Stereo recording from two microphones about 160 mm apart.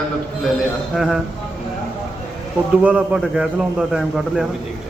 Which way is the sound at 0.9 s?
Centre (ahead or behind).